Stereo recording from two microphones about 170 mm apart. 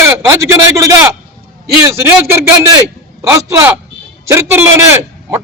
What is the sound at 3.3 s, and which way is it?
A man's voice, 15° right (ahead or behind).